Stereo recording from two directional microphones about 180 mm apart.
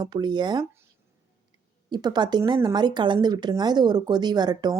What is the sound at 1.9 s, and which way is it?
Speech, 25° right (ahead or behind).